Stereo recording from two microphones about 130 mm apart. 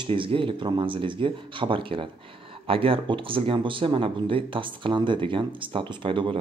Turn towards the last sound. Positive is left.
turn(degrees=-40)  # may be behind; listen again after turning